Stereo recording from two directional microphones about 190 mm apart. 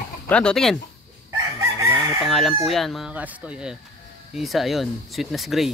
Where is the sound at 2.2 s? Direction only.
Centre (ahead or behind).